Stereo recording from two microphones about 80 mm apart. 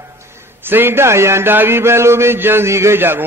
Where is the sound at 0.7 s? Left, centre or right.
Right.